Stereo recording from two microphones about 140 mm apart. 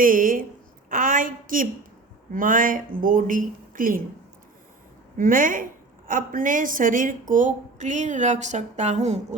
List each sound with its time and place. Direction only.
0.0 s a woman's voice: 80° right
0.9 s a sound: 75° right (ahead or behind)
2.3 s speech: 75° right (ahead or behind)
5.1 s a woman's voice: 75° right (ahead or behind); by 9.2 s 55° right (ahead or behind)